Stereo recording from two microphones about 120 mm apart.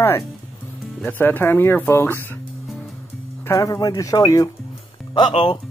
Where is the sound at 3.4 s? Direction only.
30° left (ahead or behind).